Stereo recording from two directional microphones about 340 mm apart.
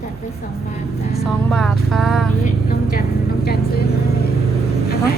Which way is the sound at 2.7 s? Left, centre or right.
Left.